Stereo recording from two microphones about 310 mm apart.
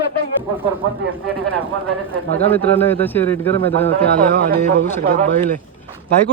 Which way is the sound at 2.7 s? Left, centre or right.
Centre.